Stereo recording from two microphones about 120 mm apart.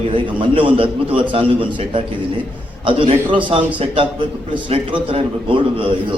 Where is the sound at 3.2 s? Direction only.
45° right (ahead or behind).